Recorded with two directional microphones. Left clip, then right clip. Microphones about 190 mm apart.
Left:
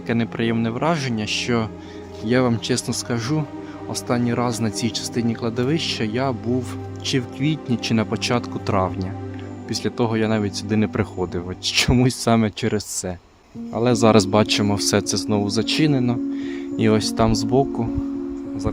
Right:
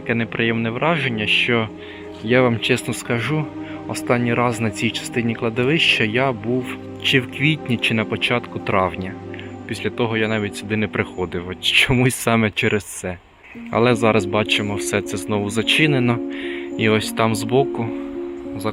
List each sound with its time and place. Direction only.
0.1 s speech: 10° left (ahead or behind)
7.9 s speech: 25° left (ahead or behind)
8.7 s speech: 10° left (ahead or behind)
10.0 s speech: 25° left (ahead or behind)
14.0 s speech: 30° left (ahead or behind); by 17.8 s 15° left (ahead or behind)